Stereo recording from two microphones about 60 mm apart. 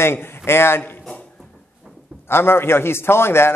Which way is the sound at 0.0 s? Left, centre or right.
Left.